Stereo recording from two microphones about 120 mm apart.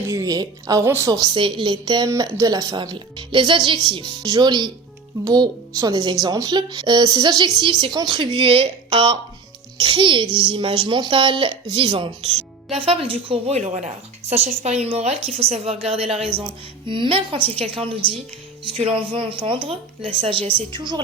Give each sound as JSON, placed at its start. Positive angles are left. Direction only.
{"t": 0.1, "sound": "a woman's voice", "side_deg": -30}
{"t": 1.3, "sound": "a woman's voice", "side_deg": -45}
{"t": 2.0, "sound": "a woman's voice", "side_deg": -25}
{"t": 13.6, "sound": "speech", "side_deg": -75}
{"t": 16.8, "sound": "a woman's voice", "side_deg": -45}
{"t": 20.6, "sound": "a woman's voice", "side_deg": -40}